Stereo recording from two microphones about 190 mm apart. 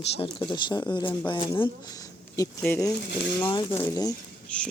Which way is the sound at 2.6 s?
10° left (ahead or behind).